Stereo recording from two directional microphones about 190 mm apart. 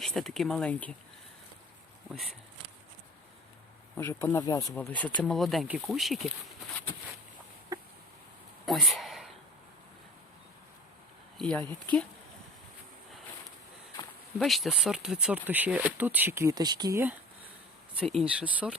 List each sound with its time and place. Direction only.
0.0 s speech: centre (ahead or behind)
3.9 s speech: 10° left (ahead or behind)
7.7 s a sound: 15° right (ahead or behind)
8.6 s a sound: centre (ahead or behind)
11.3 s speech: centre (ahead or behind)
14.3 s speech: centre (ahead or behind)